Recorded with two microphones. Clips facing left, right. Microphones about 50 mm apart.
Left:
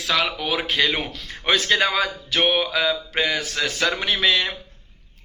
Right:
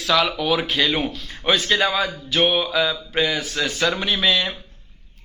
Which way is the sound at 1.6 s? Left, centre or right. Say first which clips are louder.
Even; left.